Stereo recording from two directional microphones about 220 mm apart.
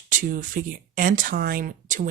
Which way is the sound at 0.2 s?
40° right (ahead or behind).